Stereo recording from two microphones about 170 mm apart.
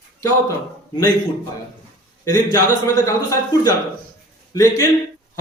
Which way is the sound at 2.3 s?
20° left (ahead or behind).